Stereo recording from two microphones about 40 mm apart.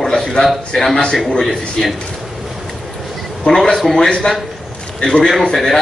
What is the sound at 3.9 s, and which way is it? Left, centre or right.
Speech, centre.